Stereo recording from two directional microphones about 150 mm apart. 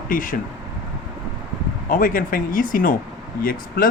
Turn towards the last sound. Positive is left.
turn(degrees=70)  # may be behind; listen again after turning